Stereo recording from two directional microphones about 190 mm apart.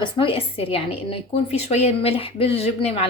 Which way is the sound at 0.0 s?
30° left (ahead or behind).